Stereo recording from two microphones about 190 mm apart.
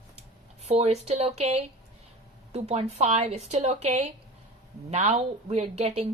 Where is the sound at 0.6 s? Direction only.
35° right (ahead or behind).